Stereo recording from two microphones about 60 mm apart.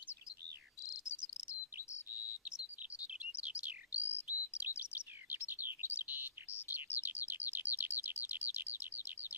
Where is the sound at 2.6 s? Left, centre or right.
Right.